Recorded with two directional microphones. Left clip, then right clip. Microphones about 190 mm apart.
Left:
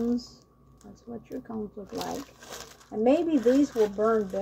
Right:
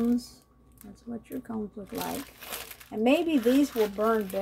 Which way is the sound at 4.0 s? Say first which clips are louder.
Left 1 dB; 30° right (ahead or behind).